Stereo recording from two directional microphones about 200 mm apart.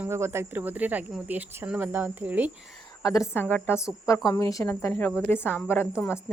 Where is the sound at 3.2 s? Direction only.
10° left (ahead or behind).